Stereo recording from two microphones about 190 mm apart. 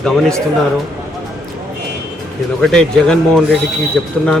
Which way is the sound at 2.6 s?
5° left (ahead or behind).